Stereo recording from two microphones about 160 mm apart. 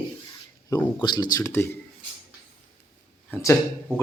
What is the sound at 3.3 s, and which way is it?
Speech, 20° left (ahead or behind).